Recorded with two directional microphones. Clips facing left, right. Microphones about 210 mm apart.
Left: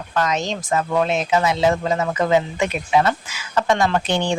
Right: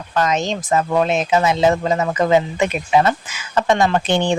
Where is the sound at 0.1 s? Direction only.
20° right (ahead or behind).